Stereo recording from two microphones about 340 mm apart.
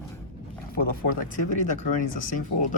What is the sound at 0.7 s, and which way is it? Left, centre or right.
Speech, left.